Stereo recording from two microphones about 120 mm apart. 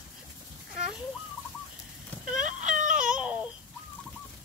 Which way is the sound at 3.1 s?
10° right (ahead or behind).